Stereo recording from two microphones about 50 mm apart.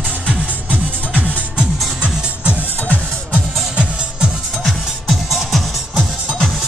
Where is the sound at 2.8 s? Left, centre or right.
Left.